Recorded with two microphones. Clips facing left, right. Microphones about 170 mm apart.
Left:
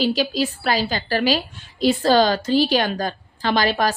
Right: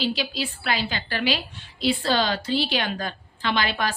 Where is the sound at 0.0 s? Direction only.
45° left (ahead or behind).